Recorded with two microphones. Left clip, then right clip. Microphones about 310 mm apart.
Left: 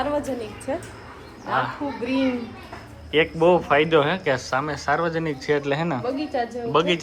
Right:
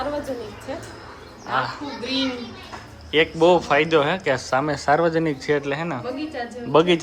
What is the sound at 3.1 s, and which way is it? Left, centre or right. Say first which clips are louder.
Speech: right 2 dB; centre.